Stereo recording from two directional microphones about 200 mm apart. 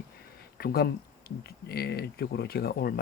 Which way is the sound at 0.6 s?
50° left (ahead or behind).